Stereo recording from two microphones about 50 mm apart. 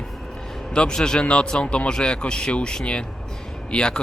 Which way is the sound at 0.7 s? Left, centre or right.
Centre.